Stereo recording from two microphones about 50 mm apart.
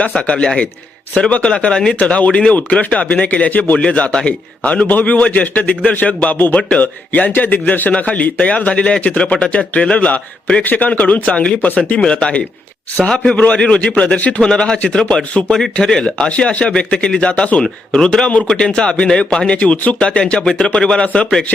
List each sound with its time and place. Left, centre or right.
0.1 s speech: centre
14.4 s speech: centre
15.5 s speech: centre; by 17.6 s left
17.6 s speech: centre
18.3 s speech: left
19.5 s speech: left